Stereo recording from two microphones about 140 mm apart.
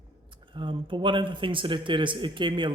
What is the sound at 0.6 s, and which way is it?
Speech, 35° right (ahead or behind).